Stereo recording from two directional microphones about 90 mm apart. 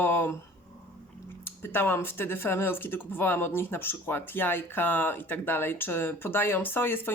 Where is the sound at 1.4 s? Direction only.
25° left (ahead or behind).